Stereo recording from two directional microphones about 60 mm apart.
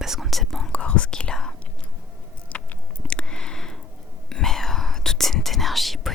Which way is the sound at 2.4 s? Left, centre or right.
Left.